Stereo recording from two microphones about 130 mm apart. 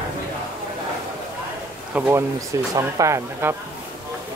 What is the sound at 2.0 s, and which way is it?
Speech, 15° right (ahead or behind).